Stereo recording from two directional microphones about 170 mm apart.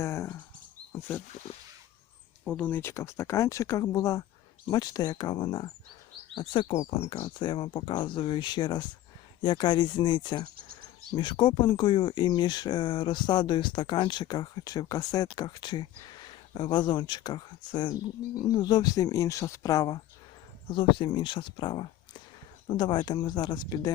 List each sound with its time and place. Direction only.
0.0 s speech: 15° left (ahead or behind)
2.4 s speech: 10° left (ahead or behind); by 10.4 s 25° left (ahead or behind)
10.4 s speech: 60° right (ahead or behind)
11.1 s speech: 30° left (ahead or behind)